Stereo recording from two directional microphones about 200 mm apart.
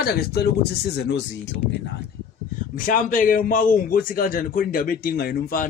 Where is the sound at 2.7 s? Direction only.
40° left (ahead or behind).